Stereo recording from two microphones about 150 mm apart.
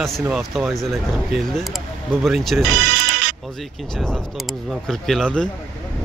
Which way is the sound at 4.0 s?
Centre (ahead or behind).